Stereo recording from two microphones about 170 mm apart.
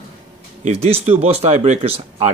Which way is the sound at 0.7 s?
35° right (ahead or behind).